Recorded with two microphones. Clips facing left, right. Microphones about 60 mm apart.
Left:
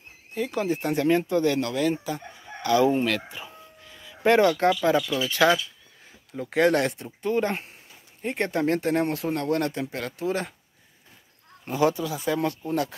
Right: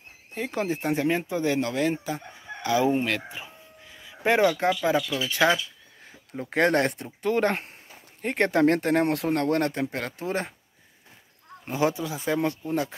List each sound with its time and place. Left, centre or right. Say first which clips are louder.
0.3 s speech: left 2 dB; right
3.3 s a sound: even; centre
5.2 s speech: left 2 dB; centre
6.3 s speech: left 1 dB; right
7.2 s speech: right 1 dB; right
11.6 s speech: left 2 dB; right